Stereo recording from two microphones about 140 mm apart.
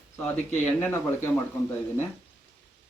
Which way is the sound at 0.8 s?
15° left (ahead or behind).